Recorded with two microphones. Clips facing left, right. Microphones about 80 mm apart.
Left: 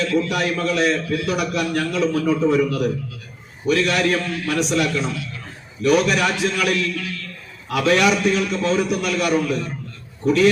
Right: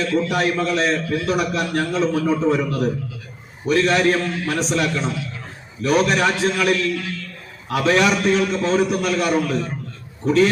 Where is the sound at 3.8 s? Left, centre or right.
Right.